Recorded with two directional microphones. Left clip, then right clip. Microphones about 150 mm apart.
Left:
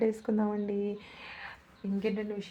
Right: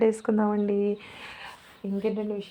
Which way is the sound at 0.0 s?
15° right (ahead or behind).